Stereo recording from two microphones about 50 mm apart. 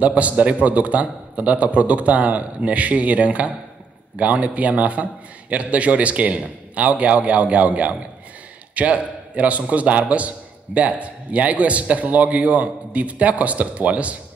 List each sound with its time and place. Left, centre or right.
0.0 s a man's voice: right